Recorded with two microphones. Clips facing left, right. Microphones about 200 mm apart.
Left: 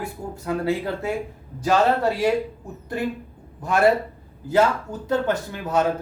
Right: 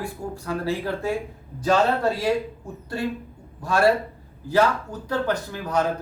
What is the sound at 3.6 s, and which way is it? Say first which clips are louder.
Speech: left 1 dB; 20° left (ahead or behind).